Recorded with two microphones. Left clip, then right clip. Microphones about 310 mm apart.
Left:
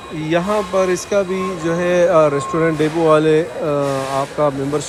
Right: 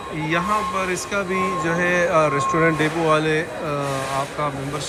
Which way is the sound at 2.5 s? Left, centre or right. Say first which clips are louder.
Left 2 dB; centre.